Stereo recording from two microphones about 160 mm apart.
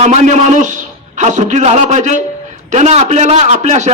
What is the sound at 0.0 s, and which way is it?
A man's voice, 45° right (ahead or behind).